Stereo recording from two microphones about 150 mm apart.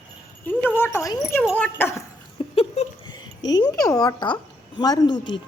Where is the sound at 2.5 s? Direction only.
40° left (ahead or behind).